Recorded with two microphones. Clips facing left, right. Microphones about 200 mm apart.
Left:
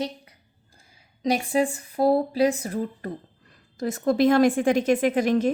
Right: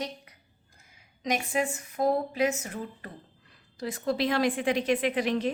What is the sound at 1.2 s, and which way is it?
A woman's voice, 35° left (ahead or behind).